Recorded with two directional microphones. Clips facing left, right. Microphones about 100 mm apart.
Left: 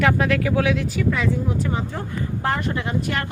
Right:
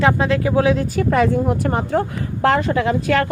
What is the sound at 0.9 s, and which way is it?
Speech, 55° right (ahead or behind).